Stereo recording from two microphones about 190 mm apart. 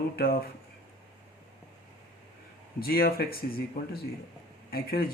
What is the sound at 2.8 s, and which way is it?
Speech, 50° left (ahead or behind).